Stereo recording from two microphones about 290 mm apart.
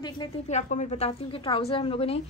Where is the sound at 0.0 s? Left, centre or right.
Centre.